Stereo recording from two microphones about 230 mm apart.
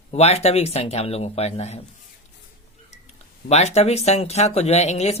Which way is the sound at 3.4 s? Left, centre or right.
Left.